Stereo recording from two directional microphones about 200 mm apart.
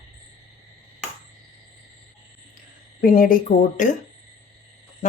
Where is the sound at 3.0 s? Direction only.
45° left (ahead or behind).